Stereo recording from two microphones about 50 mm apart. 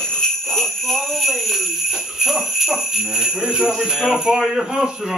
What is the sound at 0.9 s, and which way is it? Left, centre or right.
Speech, centre.